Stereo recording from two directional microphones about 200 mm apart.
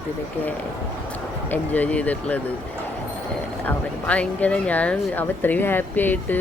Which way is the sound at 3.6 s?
5° left (ahead or behind).